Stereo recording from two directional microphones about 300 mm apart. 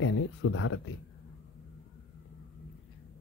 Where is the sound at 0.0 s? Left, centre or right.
Left.